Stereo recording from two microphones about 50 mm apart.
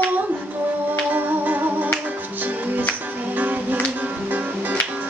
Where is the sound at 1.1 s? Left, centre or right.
Right.